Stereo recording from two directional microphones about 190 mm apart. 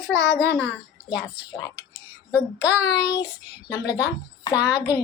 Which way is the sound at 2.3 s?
10° right (ahead or behind).